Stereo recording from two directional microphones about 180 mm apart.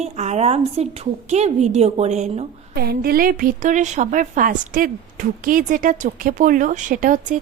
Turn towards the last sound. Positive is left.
turn(degrees=-45)  # may be behind; listen again after turning